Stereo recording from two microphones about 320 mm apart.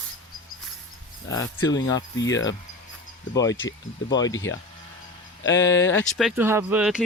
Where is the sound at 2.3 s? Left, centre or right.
Left.